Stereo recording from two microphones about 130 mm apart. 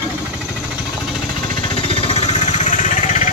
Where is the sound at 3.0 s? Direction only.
85° left.